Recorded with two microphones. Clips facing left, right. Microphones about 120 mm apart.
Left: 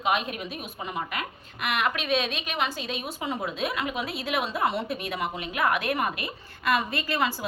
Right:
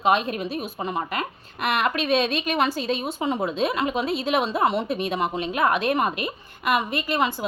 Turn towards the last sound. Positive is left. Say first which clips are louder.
# right 3 dB
turn(degrees=-20)  # may be behind; listen again after turning